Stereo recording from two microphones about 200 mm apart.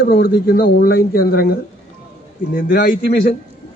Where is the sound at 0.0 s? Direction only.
50° left (ahead or behind).